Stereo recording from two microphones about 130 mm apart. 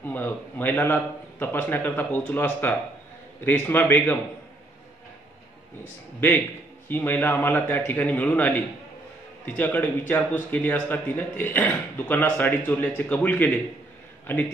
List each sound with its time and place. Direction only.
0.0 s a man's voice: 15° left (ahead or behind)
6.9 s a man's voice: 15° left (ahead or behind)